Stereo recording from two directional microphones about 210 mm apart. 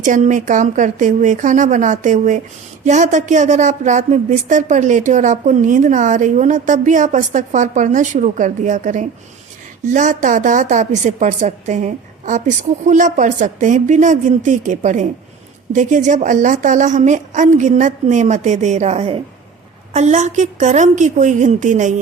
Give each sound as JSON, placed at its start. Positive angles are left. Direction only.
{"t": 0.0, "sound": "speech", "side_deg": -35}